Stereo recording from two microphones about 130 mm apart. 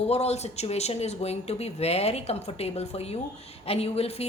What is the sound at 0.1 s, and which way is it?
A woman's voice, 55° left (ahead or behind).